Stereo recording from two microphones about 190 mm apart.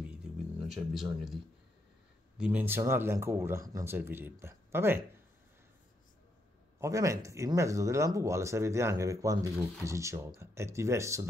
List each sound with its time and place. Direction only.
0.1 s music: 5° right (ahead or behind)
2.3 s speech: 5° right (ahead or behind)
6.8 s speech: 15° right (ahead or behind)